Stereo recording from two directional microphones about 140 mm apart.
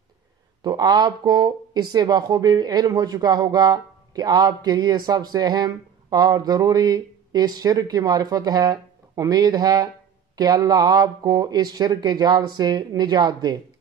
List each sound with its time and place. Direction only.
0.7 s speech: 30° right (ahead or behind)